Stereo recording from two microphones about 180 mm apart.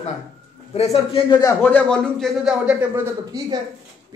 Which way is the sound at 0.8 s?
35° left (ahead or behind).